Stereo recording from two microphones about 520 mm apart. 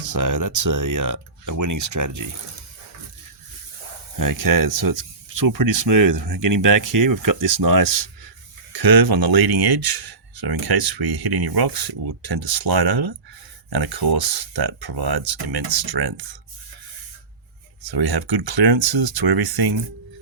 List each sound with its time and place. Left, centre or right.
0.0 s speech: right
4.2 s speech: right
17.8 s speech: right